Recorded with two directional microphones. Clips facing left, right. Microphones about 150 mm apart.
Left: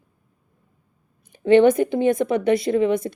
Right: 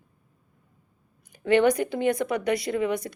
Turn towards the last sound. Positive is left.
turn(degrees=25)  # may be behind; listen again after turning